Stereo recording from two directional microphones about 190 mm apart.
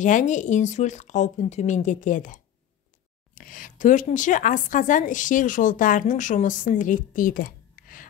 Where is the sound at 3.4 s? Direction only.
45° left (ahead or behind).